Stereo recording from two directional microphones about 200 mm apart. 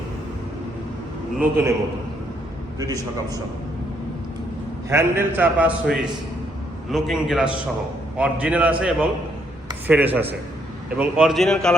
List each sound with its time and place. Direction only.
1.4 s a man's voice: 10° right (ahead or behind)
2.7 s a man's voice: 20° right (ahead or behind)
4.9 s a man's voice: 10° right (ahead or behind)